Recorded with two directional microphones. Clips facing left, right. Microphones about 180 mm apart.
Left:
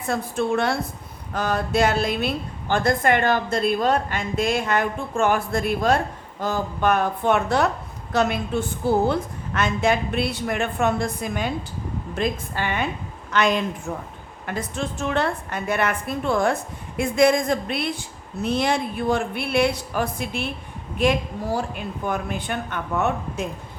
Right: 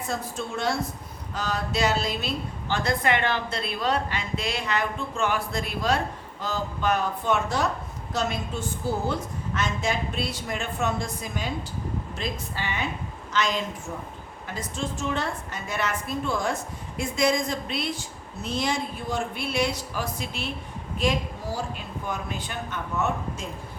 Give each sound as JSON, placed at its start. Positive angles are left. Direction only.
{"t": 0.1, "sound": "a woman's voice", "side_deg": 60}